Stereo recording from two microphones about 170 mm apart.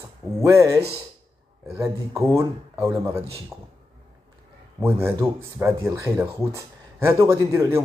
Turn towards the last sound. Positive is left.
turn(degrees=-15)  # may be behind; listen again after turning